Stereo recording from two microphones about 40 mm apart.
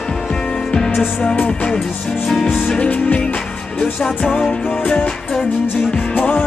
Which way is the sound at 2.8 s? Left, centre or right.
Left.